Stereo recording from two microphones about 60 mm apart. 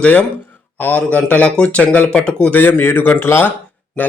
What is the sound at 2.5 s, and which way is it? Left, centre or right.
Speech, left.